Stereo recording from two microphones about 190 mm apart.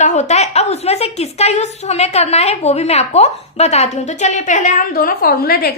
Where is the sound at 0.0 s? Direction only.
35° left (ahead or behind).